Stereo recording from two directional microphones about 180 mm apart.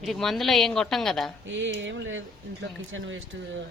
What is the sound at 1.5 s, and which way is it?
Speech, 90° right.